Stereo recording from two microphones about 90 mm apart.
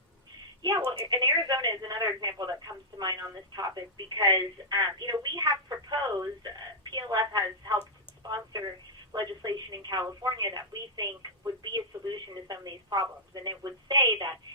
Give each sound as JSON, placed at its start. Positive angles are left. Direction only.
{"t": 0.9, "sound": "speech", "side_deg": -50}
{"t": 9.1, "sound": "speech", "side_deg": -50}